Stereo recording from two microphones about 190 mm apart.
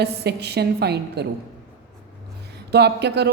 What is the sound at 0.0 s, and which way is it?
A woman's voice, 60° right (ahead or behind).